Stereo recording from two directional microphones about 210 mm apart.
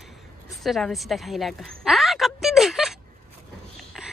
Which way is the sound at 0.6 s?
Centre (ahead or behind).